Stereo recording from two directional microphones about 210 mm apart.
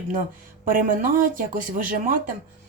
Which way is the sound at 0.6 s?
40° right (ahead or behind).